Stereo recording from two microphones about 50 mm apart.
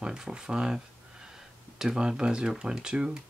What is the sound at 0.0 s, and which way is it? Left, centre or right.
Speech, centre.